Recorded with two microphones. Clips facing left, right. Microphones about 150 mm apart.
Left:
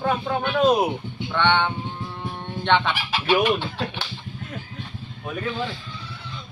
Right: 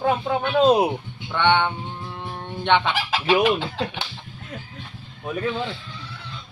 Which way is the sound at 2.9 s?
90° right.